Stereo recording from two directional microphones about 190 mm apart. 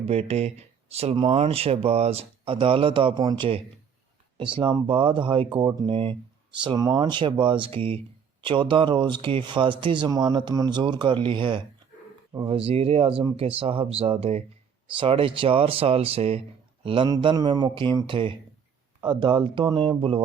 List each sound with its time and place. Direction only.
0.0 s speech: 30° right (ahead or behind)